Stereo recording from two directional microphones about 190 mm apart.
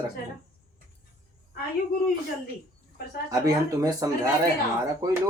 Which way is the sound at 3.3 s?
20° right (ahead or behind).